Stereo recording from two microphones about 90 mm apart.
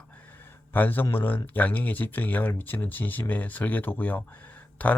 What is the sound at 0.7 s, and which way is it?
Speech, 20° left (ahead or behind).